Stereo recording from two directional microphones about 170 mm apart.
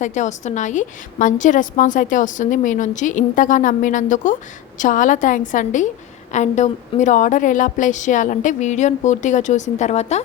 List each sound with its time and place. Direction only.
0.0 s a woman's voice: 45° left (ahead or behind)